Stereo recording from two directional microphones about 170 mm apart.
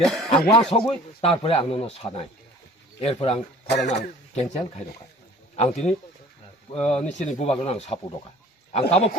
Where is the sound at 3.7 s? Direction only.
85° left.